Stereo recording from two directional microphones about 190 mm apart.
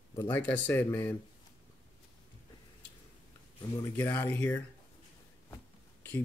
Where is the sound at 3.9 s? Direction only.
10° left (ahead or behind).